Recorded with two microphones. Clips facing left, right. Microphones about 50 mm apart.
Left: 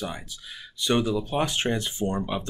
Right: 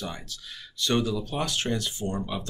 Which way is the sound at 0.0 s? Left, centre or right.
Centre.